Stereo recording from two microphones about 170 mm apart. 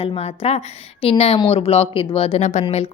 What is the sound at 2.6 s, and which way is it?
Speech, 30° left (ahead or behind).